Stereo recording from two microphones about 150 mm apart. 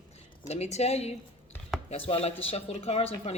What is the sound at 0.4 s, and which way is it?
Speech, 45° left (ahead or behind).